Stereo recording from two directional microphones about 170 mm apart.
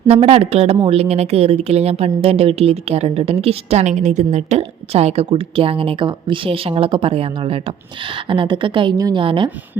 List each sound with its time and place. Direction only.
0.1 s a woman's voice: 35° right (ahead or behind)